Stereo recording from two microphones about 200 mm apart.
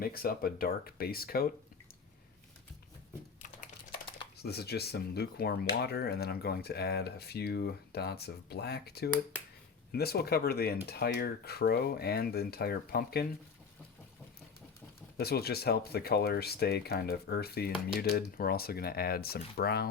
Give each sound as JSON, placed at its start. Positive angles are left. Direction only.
{"t": 0.0, "sound": "speech", "side_deg": 50}
{"t": 4.4, "sound": "speech", "side_deg": 55}
{"t": 15.2, "sound": "speech", "side_deg": 50}